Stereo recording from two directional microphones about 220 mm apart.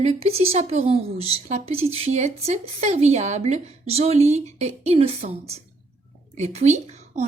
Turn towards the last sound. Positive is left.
turn(degrees=-30)  # may be behind; listen again after turning